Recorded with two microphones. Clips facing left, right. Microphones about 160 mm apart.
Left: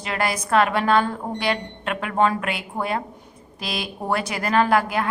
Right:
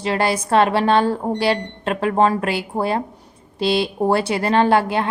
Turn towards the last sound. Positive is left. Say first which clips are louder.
# right 3 dB
turn(degrees=-30)  # may be behind; listen again after turning